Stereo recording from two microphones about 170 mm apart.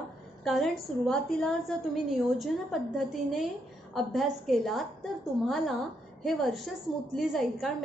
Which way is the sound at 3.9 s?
Centre (ahead or behind).